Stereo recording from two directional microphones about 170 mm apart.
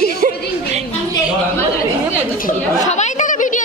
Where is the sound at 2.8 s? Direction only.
45° left (ahead or behind).